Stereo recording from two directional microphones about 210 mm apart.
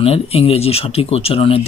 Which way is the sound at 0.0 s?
30° left (ahead or behind).